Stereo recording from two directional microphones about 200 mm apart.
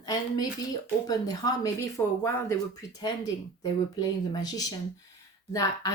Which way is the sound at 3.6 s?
20° left (ahead or behind).